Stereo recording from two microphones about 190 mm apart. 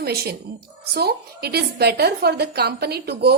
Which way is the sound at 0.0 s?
55° right (ahead or behind).